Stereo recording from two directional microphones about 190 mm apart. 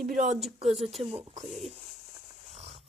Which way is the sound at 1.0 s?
30° right (ahead or behind).